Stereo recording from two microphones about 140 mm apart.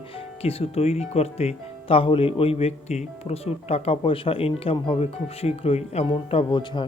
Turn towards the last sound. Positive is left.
turn(degrees=35)  # may be behind; listen again after turning